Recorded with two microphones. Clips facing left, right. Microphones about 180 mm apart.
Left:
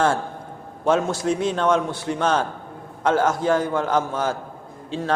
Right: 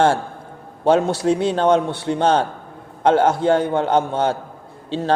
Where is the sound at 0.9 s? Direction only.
35° right (ahead or behind).